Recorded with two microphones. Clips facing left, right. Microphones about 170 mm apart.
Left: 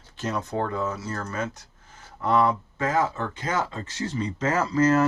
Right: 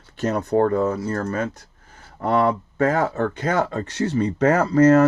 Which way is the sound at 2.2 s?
60° right (ahead or behind).